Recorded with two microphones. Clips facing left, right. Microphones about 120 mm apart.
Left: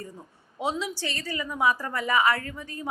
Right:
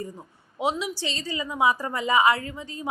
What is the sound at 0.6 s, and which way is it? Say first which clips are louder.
A woman's voice: right 2 dB; 15° right (ahead or behind).